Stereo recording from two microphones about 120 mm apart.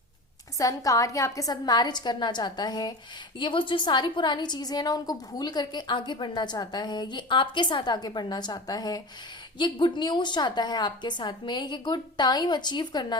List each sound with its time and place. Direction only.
0.6 s a woman's voice: 30° left (ahead or behind)